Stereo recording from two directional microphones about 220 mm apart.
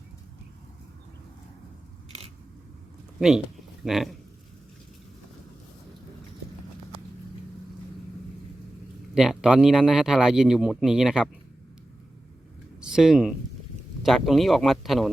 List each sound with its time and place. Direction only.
3.2 s a man's voice: centre (ahead or behind)
9.1 s a man's voice: centre (ahead or behind)
12.8 s a man's voice: centre (ahead or behind)